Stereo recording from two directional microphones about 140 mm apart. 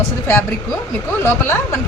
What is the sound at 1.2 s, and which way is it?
Speech, 20° left (ahead or behind).